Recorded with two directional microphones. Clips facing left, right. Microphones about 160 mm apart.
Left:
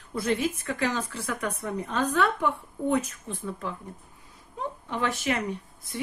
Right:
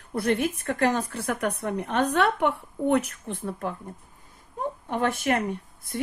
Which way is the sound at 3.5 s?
45° right (ahead or behind).